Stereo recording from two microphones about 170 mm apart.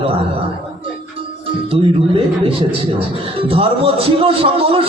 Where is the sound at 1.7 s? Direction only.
35° right (ahead or behind).